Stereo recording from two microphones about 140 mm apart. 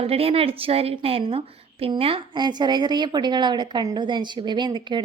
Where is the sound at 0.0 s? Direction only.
45° right (ahead or behind).